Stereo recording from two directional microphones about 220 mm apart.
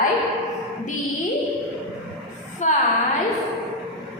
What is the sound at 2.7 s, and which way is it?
Speech, 35° left (ahead or behind).